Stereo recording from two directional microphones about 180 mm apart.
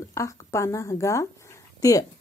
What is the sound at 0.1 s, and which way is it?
Speech, 15° left (ahead or behind).